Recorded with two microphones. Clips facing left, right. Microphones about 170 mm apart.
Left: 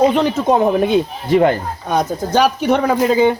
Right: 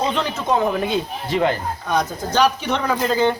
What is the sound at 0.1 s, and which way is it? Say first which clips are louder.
Speech: left 6 dB; 45° left (ahead or behind).